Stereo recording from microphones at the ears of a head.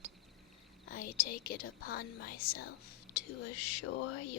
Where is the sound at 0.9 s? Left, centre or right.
Left.